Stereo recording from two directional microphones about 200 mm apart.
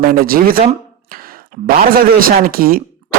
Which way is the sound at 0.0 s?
45° right (ahead or behind).